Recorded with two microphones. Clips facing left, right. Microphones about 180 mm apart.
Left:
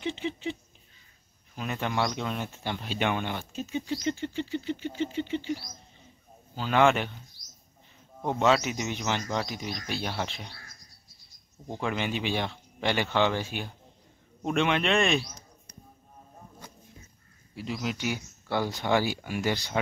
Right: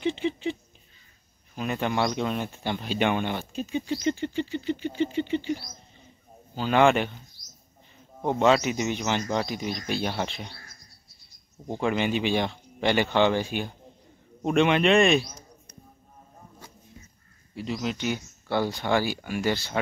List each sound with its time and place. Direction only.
0.0 s a sound: centre (ahead or behind)
1.5 s speech: 5° right (ahead or behind)
6.7 s speech: centre (ahead or behind)
8.2 s speech: 5° right (ahead or behind)
11.8 s speech: centre (ahead or behind)
17.6 s speech: 5° left (ahead or behind)
18.9 s speech: 20° left (ahead or behind)